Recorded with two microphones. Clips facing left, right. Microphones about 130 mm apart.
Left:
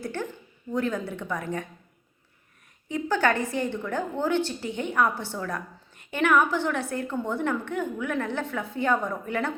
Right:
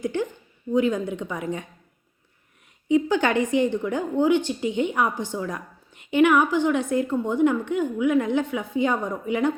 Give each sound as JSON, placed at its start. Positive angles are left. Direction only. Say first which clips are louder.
{"t": 0.0, "sound": "a woman's voice", "louder": "right 6 dB", "side_deg": -15}
{"t": 2.9, "sound": "a woman's voice", "louder": "right 4 dB", "side_deg": -15}